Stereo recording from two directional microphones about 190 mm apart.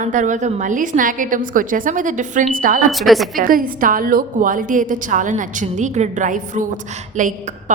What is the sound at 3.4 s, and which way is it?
A woman's voice, 45° right (ahead or behind).